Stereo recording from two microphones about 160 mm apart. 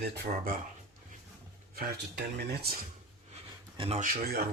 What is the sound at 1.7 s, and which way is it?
Speech, 75° right (ahead or behind).